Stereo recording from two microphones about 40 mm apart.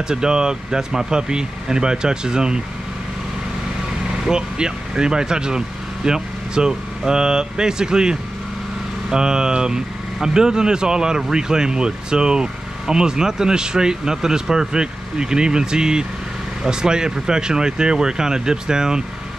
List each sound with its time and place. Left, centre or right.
0.1 s speech: centre
4.2 s speech: centre